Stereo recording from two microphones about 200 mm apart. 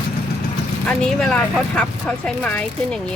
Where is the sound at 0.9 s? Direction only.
5° left (ahead or behind).